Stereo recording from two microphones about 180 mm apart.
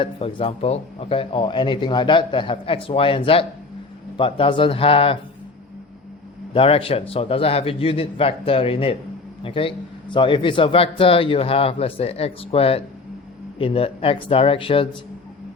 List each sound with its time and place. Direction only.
0.0 s speech: 30° left (ahead or behind)
6.5 s a man's voice: 30° left (ahead or behind)